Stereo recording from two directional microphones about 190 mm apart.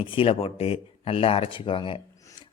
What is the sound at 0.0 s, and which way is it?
Speech, 25° left (ahead or behind).